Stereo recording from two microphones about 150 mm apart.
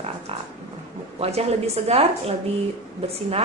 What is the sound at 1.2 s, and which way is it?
Speech, 45° right (ahead or behind).